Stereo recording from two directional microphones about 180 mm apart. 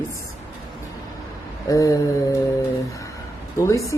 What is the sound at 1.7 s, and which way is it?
Mantra, 20° left (ahead or behind).